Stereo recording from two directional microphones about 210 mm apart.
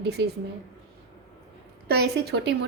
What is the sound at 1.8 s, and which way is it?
Speech, 50° right (ahead or behind).